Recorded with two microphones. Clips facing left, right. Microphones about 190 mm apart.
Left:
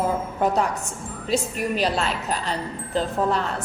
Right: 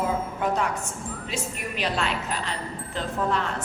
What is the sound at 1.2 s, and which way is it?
Speech, 35° left (ahead or behind).